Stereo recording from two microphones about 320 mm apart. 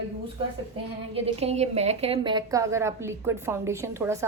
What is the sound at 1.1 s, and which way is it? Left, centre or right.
A woman's voice, centre.